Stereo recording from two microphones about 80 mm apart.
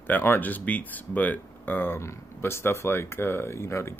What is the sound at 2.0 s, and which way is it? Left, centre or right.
Speech, left.